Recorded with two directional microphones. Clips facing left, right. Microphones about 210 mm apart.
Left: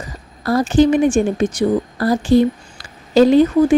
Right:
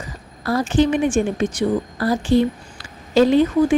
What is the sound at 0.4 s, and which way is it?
A woman's voice, 40° left (ahead or behind).